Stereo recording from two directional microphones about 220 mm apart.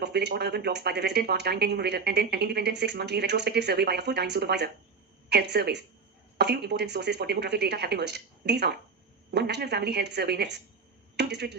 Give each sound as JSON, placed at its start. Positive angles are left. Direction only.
{"t": 0.0, "sound": "speech", "side_deg": -50}